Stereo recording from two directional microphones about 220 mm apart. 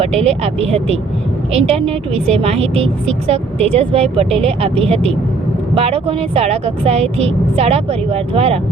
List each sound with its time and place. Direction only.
0.0 s speech: 30° right (ahead or behind)